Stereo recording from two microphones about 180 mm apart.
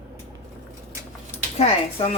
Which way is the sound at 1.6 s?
35° left (ahead or behind).